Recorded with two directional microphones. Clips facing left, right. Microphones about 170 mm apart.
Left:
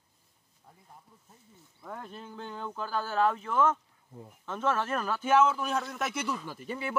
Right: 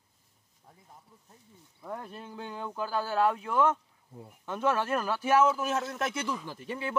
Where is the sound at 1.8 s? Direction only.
5° right (ahead or behind); by 6.9 s 10° left (ahead or behind).